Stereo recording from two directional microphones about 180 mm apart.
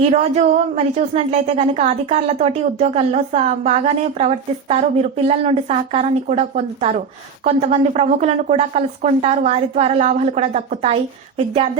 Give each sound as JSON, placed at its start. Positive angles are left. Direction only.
{"t": 0.0, "sound": "speech", "side_deg": -35}